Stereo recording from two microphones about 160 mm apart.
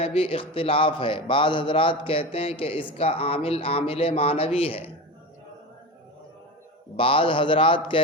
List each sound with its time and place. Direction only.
0.0 s a man's voice: 35° left (ahead or behind)
6.9 s a man's voice: 35° left (ahead or behind)